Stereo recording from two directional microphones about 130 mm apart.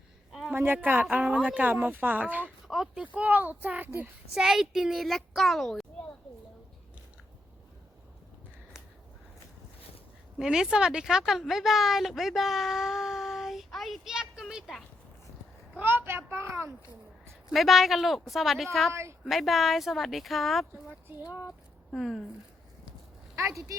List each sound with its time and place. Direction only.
0.3 s a sound: centre (ahead or behind)
0.5 s a child's voice: 15° right (ahead or behind); by 6.1 s centre (ahead or behind)
10.3 s speech: 5° right (ahead or behind)
15.8 s a child's voice: 15° right (ahead or behind)
17.5 s a child's voice: centre (ahead or behind)
21.9 s a child's voice: centre (ahead or behind)
23.5 s a child's voice: 25° right (ahead or behind)